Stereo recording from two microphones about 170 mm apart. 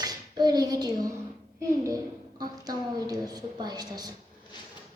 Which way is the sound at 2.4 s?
20° right (ahead or behind).